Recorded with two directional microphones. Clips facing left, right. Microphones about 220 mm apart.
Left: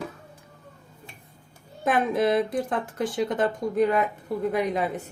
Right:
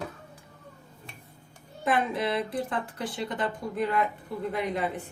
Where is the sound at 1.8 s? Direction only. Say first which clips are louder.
Left 5 dB; 45° left (ahead or behind).